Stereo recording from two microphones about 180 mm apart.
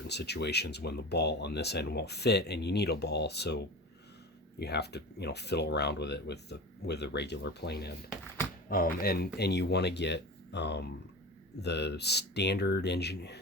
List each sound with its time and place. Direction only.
0.1 s speech: 70° left (ahead or behind)